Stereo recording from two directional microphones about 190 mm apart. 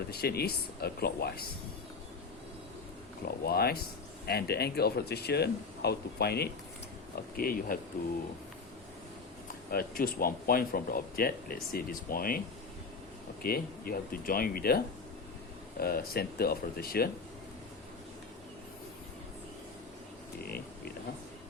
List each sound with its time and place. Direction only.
0.1 s speech: 55° left (ahead or behind)
3.2 s speech: 55° left (ahead or behind)
9.7 s speech: 50° left (ahead or behind)
13.4 s speech: 50° left (ahead or behind)
15.8 s speech: 55° left (ahead or behind)
20.4 s a sound: 55° left (ahead or behind)